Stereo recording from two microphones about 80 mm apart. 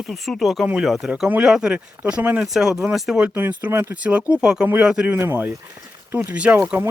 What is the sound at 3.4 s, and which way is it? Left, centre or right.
Speech, right.